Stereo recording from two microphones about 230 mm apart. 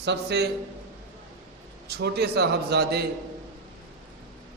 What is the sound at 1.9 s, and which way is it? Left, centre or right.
A man's voice, right.